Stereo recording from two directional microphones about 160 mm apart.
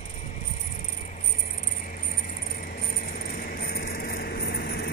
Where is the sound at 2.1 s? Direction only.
65° left (ahead or behind).